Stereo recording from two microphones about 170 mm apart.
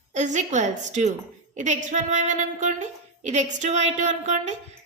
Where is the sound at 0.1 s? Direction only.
45° right (ahead or behind).